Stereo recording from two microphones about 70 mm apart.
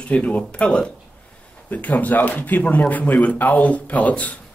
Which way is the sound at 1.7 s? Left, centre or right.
Left.